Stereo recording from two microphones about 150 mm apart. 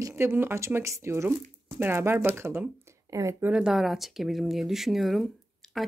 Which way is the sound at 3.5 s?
5° right (ahead or behind).